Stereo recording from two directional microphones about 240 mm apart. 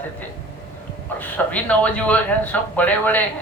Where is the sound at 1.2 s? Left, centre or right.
Centre.